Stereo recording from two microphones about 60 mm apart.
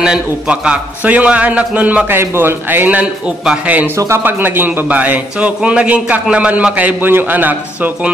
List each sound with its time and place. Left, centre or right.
0.0 s a man's voice: centre
2.0 s a man's voice: right
3.6 s a man's voice: right